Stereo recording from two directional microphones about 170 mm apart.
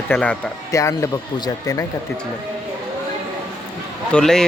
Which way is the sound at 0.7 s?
20° left (ahead or behind).